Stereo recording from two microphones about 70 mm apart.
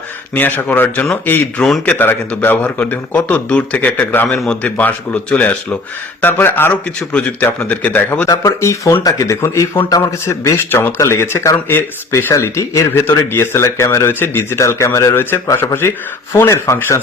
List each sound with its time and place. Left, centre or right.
0.3 s a man's voice: left
7.1 s a man's voice: centre
8.6 s speech: left
10.7 s speech: left
12.3 s speech: left
12.9 s speech: left